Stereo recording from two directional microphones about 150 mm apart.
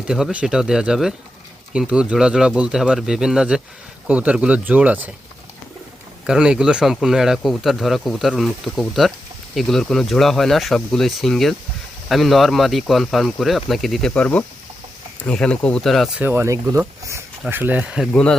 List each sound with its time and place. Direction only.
0.1 s speech: 5° right (ahead or behind)
6.2 s speech: 5° right (ahead or behind)
16.2 s speech: 15° right (ahead or behind)
18.1 s speech: 5° left (ahead or behind)